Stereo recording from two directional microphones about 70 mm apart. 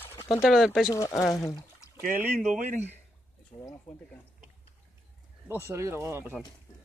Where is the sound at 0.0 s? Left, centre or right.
Left.